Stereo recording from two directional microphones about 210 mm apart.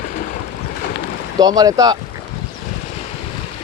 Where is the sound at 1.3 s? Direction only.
20° right (ahead or behind).